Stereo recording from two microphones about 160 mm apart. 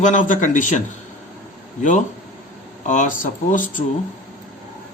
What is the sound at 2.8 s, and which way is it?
Speech, 55° left (ahead or behind).